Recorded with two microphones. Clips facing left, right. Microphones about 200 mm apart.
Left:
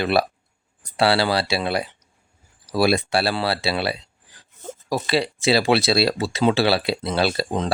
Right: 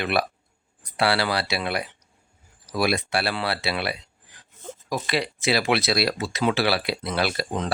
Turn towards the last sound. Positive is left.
turn(degrees=30)  # may be behind; listen again after turning